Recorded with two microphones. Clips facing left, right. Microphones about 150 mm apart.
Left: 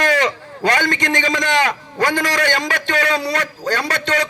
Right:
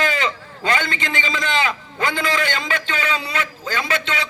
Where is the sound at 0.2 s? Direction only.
40° left (ahead or behind).